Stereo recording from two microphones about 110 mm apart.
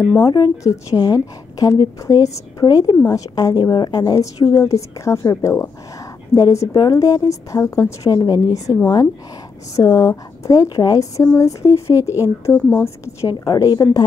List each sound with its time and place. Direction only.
0.2 s a woman's voice: 40° left (ahead or behind)
12.5 s speech: 15° left (ahead or behind)
12.8 s a woman's voice: 25° left (ahead or behind)